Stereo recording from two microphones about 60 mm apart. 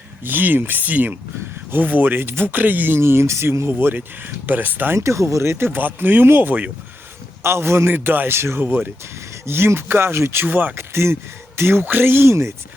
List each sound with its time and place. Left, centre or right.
0.3 s speech: right
3.0 s speech: right
4.9 s speech: right
8.6 s speech: right
10.4 s speech: right
10.8 s speech: right